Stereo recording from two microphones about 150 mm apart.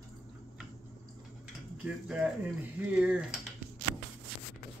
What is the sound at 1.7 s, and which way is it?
Speech, 5° right (ahead or behind).